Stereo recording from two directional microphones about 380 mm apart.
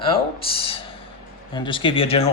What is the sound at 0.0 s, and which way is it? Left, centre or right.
Speech, centre.